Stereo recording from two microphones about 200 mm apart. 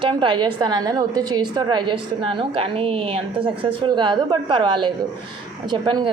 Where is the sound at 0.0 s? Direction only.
25° right (ahead or behind).